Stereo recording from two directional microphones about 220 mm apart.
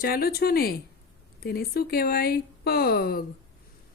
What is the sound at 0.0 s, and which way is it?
Speech, 45° left (ahead or behind).